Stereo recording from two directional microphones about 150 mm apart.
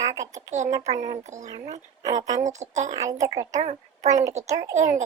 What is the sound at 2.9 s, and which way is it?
Speech, 20° right (ahead or behind).